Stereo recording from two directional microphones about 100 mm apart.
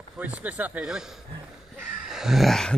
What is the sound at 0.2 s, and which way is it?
Speech, 15° right (ahead or behind).